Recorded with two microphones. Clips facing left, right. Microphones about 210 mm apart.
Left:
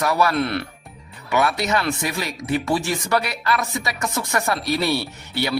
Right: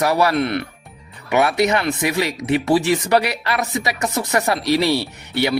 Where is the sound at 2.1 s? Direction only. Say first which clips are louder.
Right 5 dB; 70° right (ahead or behind).